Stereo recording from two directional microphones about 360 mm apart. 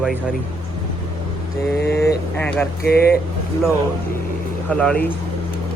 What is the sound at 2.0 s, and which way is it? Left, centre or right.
Speech, centre.